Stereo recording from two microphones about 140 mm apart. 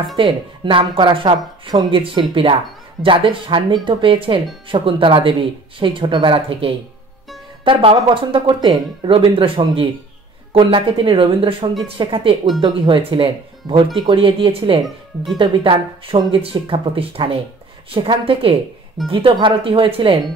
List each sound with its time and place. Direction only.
0.1 s speech: 35° right (ahead or behind)